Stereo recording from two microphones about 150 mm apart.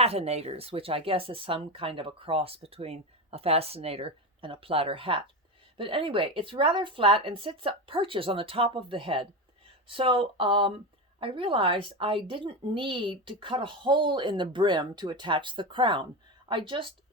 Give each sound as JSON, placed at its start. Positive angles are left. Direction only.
{"t": 0.0, "sound": "speech", "side_deg": -45}